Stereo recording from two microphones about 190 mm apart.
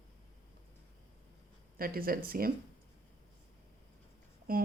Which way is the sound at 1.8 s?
50° right (ahead or behind).